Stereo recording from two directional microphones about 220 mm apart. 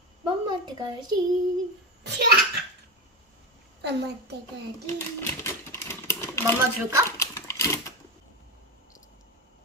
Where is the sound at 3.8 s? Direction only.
50° right (ahead or behind).